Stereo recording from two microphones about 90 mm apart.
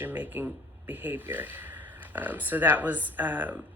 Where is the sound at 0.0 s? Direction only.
20° right (ahead or behind).